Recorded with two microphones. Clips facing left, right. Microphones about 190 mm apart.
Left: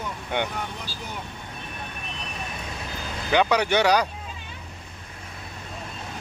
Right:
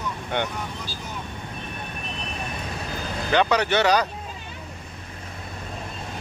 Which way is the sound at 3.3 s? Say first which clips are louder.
Even; 10° left (ahead or behind).